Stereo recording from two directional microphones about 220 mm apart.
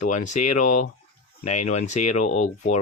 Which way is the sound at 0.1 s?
35° left (ahead or behind).